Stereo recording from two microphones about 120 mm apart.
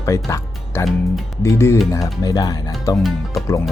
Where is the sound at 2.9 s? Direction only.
Centre (ahead or behind).